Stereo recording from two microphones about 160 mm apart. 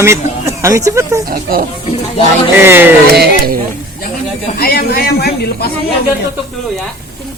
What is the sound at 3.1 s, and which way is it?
Speech, 75° right (ahead or behind).